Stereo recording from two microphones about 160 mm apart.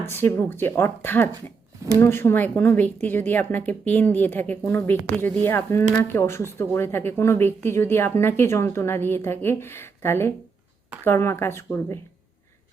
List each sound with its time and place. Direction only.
0.1 s speech: 15° left (ahead or behind)